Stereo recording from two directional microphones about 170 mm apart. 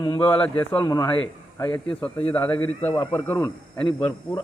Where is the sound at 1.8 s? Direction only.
5° left (ahead or behind).